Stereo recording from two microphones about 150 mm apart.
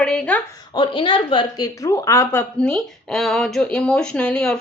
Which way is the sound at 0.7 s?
30° left (ahead or behind).